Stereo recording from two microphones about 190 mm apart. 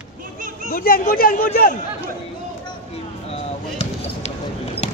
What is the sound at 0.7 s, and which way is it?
Speech, 50° left (ahead or behind).